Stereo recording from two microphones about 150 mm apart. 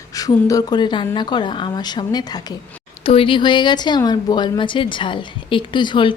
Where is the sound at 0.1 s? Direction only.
25° left (ahead or behind).